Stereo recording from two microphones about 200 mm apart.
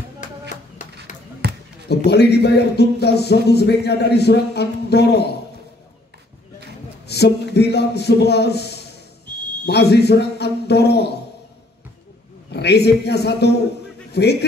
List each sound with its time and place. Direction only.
0.2 s a sound: 40° left (ahead or behind)
1.4 s basketball bounce: 55° right (ahead or behind)
2.0 s speech: 55° left (ahead or behind)
7.1 s speech: 55° left (ahead or behind)
12.5 s speech: 55° left (ahead or behind)